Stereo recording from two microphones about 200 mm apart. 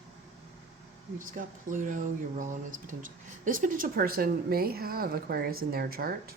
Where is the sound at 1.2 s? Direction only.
40° right (ahead or behind).